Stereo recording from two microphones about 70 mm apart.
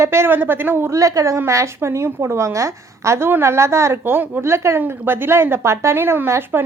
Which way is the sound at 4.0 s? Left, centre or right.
Right.